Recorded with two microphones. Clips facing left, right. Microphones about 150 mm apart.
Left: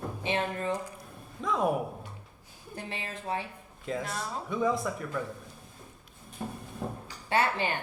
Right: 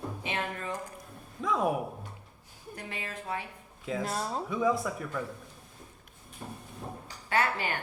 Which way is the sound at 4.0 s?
35° right (ahead or behind).